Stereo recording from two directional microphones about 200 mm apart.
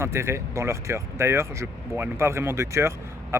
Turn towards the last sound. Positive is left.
turn(degrees=-15)  # may be behind; listen again after turning